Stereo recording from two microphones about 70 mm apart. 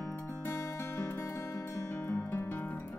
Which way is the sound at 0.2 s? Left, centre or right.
Left.